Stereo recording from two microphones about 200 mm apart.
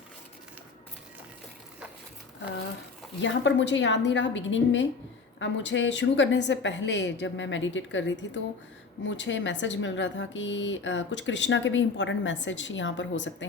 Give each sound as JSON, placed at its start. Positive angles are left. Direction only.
{"t": 3.2, "sound": "speech", "side_deg": 65}